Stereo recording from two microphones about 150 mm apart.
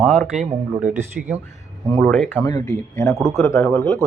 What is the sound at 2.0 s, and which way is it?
Speech, 10° left (ahead or behind).